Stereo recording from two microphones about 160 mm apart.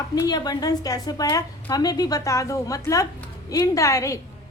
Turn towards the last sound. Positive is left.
turn(degrees=20)  # may be behind; listen again after turning